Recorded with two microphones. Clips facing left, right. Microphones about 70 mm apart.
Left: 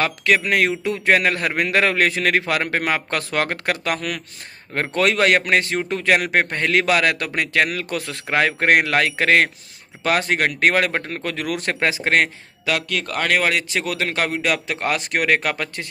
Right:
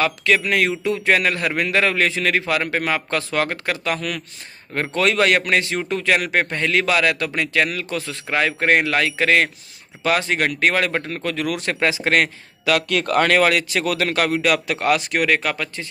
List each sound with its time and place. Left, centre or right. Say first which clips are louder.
0.0 s a man's voice: even; left
12.8 s speech: right 6 dB; centre
13.3 s a man's voice: right 3 dB; centre
15.0 s speech: even; left